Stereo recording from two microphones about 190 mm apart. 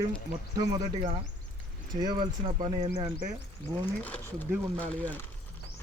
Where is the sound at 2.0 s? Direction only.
20° right (ahead or behind).